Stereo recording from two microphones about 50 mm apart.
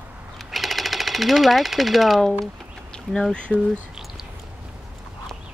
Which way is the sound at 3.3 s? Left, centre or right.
Centre.